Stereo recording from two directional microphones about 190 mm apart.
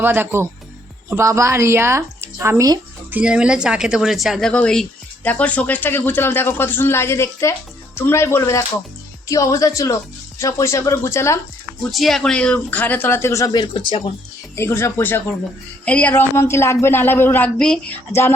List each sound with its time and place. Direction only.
0.0 s speech: 10° right (ahead or behind); by 11.3 s 15° left (ahead or behind)
11.9 s speech: centre (ahead or behind); by 14.1 s 25° left (ahead or behind)
14.5 s speech: 15° left (ahead or behind)